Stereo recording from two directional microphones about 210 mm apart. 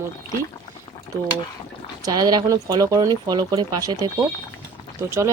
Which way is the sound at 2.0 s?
20° right (ahead or behind).